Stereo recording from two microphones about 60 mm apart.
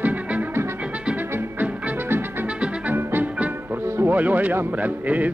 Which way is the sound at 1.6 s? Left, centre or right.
Right.